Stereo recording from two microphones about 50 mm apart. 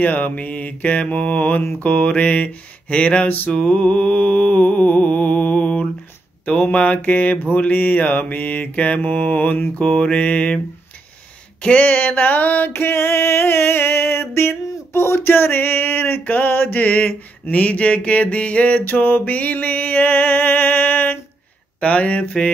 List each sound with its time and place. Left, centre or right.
0.0 s mantra: left
3.3 s mantra: left
3.5 s mantra: centre
9.8 s mantra: centre
11.6 s mantra: left
12.7 s music: left
21.7 s speech: left